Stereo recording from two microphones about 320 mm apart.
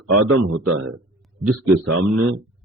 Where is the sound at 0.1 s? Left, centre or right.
Right.